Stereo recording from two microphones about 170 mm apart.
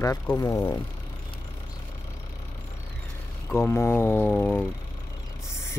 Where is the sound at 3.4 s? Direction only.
15° left (ahead or behind).